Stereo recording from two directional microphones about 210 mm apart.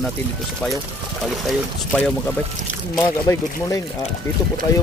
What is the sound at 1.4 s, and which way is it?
Speech, centre (ahead or behind).